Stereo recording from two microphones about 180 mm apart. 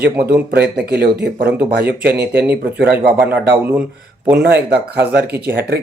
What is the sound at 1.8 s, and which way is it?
Speech, 10° right (ahead or behind).